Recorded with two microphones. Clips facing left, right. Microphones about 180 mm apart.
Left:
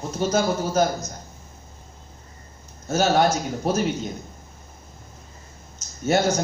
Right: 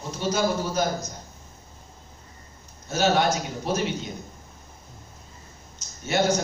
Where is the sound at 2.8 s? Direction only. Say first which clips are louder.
Left 3 dB; 45° left (ahead or behind).